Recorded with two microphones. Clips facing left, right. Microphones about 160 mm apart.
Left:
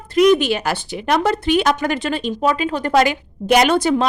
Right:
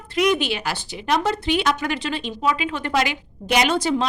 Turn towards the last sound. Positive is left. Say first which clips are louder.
# left 5 dB
turn(degrees=55)  # may be behind; listen again after turning